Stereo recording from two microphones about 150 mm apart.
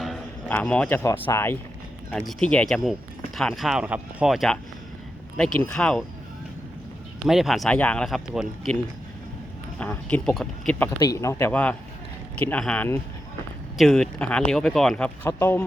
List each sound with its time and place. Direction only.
0.0 s a sound: centre (ahead or behind)
0.5 s speech: 5° left (ahead or behind)
2.1 s speech: 5° left (ahead or behind)
7.3 s speech: centre (ahead or behind)
9.7 s speech: 10° left (ahead or behind)
11.0 s a man's voice: 20° left (ahead or behind)
15.3 s a man's voice: 20° left (ahead or behind)